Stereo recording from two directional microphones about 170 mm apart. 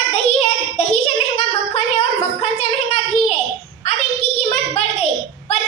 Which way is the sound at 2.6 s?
40° left (ahead or behind).